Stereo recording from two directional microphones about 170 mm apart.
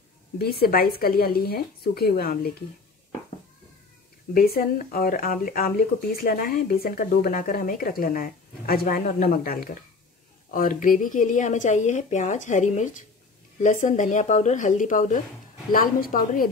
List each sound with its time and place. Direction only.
0.4 s speech: 65° left (ahead or behind)
4.3 s speech: 60° left (ahead or behind)